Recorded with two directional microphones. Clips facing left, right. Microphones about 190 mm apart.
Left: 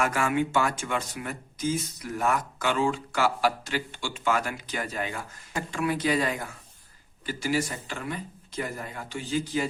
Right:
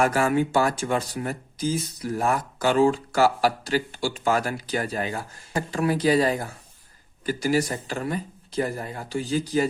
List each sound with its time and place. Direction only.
0.0 s speech: 35° right (ahead or behind)